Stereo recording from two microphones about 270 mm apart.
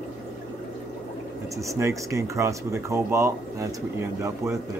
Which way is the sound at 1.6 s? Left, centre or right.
Centre.